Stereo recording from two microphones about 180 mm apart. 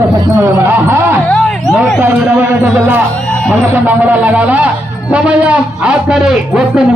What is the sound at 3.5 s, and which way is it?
A man's voice, 10° right (ahead or behind).